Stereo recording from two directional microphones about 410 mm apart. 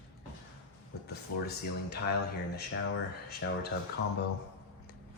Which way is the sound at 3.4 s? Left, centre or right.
Left.